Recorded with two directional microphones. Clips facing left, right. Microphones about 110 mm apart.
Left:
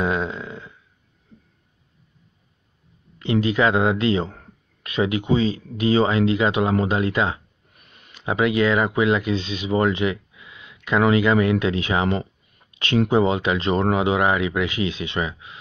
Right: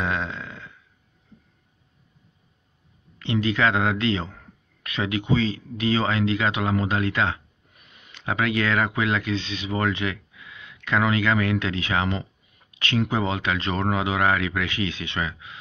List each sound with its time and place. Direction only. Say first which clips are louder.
0.0 s snoring: left 4 dB; 15° left (ahead or behind)
3.3 s speech: left 3 dB; 20° left (ahead or behind)
12.7 s a sound: left 4 dB; 20° left (ahead or behind)
13.1 s speech: left 6 dB; 20° left (ahead or behind)